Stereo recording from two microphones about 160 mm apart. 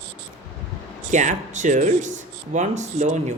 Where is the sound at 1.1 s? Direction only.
50° right (ahead or behind).